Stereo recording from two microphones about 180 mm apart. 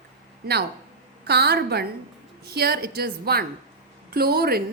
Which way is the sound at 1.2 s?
65° right (ahead or behind).